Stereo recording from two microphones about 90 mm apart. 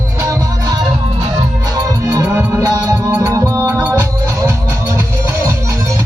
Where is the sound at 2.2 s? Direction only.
25° right (ahead or behind).